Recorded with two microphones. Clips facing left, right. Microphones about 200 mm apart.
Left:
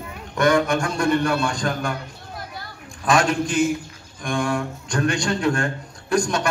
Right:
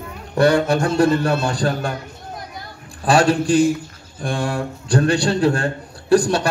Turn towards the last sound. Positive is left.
turn(degrees=-35)  # may be behind; listen again after turning